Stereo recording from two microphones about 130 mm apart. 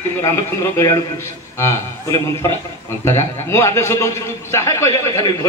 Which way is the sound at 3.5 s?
20° left (ahead or behind).